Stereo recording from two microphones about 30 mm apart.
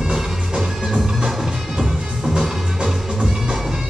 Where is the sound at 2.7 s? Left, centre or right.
Centre.